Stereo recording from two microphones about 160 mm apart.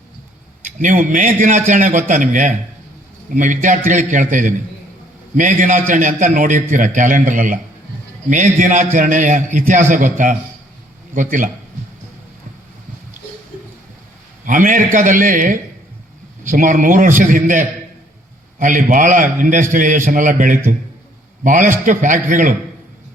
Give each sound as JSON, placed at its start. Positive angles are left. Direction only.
{"t": 0.8, "sound": "a man's voice", "side_deg": -55}
{"t": 14.4, "sound": "a man's voice", "side_deg": -55}